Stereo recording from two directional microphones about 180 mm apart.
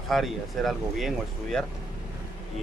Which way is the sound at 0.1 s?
Centre (ahead or behind).